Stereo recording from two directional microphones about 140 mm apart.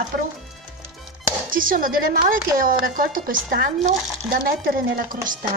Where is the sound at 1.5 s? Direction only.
80° right.